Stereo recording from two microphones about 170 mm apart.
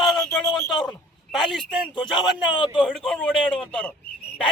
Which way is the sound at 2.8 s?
5° left (ahead or behind).